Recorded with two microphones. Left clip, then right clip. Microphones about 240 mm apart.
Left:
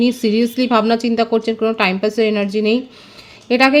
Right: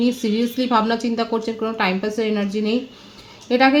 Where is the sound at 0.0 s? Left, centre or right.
Left.